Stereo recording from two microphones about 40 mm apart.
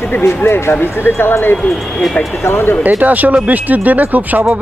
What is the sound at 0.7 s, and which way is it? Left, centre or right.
Speech, left.